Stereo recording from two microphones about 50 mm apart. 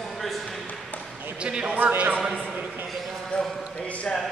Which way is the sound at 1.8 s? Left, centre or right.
Right.